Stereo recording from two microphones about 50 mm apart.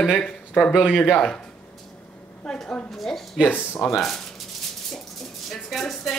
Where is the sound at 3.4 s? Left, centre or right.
Left.